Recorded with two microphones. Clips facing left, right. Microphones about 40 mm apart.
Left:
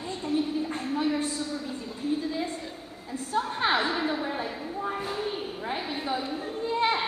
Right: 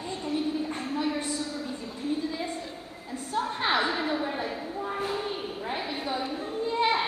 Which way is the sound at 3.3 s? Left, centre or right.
Centre.